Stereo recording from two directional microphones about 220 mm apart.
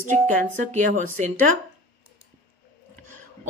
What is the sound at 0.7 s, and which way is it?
Speech, 35° right (ahead or behind).